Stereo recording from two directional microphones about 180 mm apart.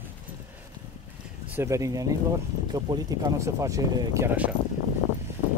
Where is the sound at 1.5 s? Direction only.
15° right (ahead or behind).